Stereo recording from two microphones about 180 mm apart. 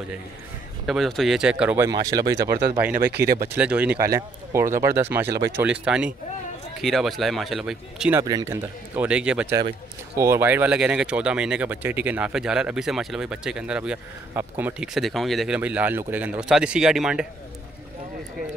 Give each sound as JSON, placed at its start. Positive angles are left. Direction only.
{"t": 0.8, "sound": "speech", "side_deg": 0}
{"t": 1.9, "sound": "speech", "side_deg": -20}
{"t": 2.8, "sound": "speech", "side_deg": -10}
{"t": 3.1, "sound": "speech", "side_deg": -60}
{"t": 3.4, "sound": "speech", "side_deg": -10}
{"t": 8.2, "sound": "speech", "side_deg": -20}